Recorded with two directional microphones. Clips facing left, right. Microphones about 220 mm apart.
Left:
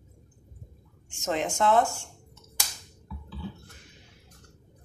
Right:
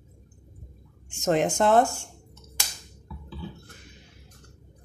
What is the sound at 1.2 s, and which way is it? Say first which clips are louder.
Speech: right 5 dB; 50° right (ahead or behind).